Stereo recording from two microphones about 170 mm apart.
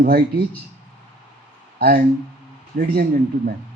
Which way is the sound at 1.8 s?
65° right (ahead or behind).